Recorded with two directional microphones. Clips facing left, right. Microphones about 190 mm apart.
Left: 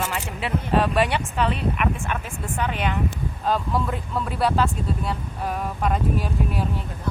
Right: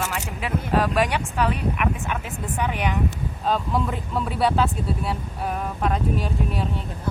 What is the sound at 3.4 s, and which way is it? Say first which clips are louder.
Speech: even; centre (ahead or behind).